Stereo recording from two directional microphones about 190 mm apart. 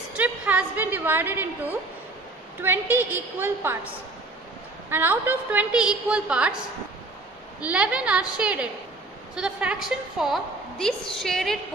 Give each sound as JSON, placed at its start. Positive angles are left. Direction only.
{"t": 0.2, "sound": "a woman's voice", "side_deg": -10}
{"t": 7.6, "sound": "a woman's voice", "side_deg": -5}